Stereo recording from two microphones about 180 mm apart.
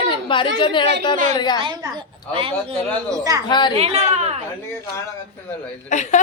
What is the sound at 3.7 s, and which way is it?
Speech, 35° right (ahead or behind).